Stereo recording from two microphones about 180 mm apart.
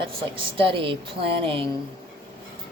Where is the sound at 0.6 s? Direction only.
30° right (ahead or behind).